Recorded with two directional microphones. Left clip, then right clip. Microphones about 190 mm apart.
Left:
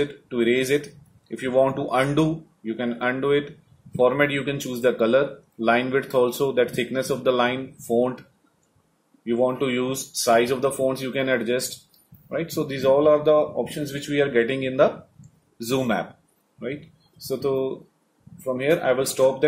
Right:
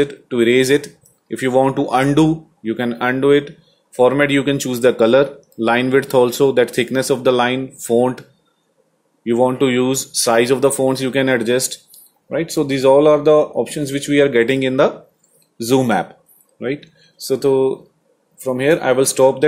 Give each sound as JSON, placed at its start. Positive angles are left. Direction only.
{"t": 0.0, "sound": "speech", "side_deg": -55}
{"t": 9.2, "sound": "speech", "side_deg": -55}